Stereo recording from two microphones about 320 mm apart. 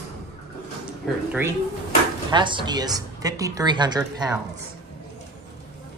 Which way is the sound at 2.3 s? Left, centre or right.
Centre.